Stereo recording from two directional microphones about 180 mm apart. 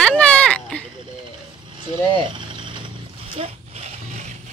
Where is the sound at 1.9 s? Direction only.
25° right (ahead or behind).